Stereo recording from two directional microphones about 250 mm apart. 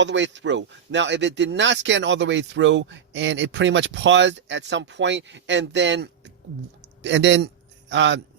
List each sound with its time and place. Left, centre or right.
0.0 s a man's voice: right